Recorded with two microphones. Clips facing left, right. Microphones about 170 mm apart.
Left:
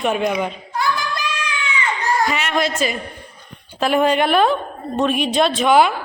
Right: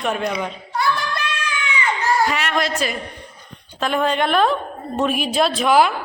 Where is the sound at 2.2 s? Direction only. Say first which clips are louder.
Left 1 dB; centre (ahead or behind).